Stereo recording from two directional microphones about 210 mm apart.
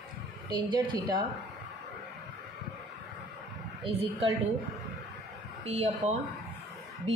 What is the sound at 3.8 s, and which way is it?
Speech, 25° right (ahead or behind).